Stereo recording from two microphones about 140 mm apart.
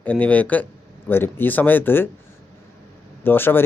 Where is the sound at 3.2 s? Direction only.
15° left (ahead or behind).